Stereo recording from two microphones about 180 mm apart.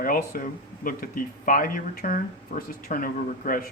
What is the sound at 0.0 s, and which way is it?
Speech, 50° left (ahead or behind).